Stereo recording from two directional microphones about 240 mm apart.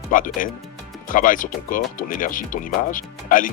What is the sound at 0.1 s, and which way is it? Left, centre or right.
Speech, left.